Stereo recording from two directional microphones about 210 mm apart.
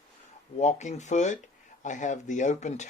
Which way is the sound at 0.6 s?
35° left (ahead or behind).